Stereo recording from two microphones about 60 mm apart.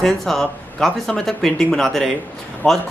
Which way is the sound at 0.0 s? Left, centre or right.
Centre.